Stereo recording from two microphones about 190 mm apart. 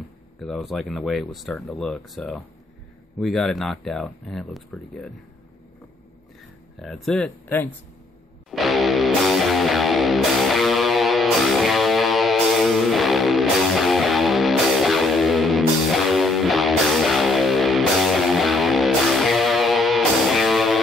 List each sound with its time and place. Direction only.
0.4 s speech: centre (ahead or behind)
6.8 s speech: 5° left (ahead or behind)
8.5 s music: centre (ahead or behind)